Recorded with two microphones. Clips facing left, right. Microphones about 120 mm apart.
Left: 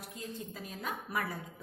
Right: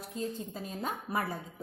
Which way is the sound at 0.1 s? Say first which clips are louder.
Right 7 dB; 30° right (ahead or behind).